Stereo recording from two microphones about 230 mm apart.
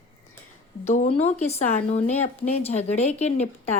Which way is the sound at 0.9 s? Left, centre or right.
Left.